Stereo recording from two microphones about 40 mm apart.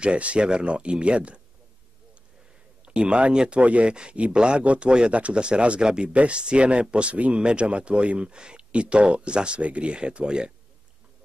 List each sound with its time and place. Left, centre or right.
0.0 s speech: right
2.8 s speech: right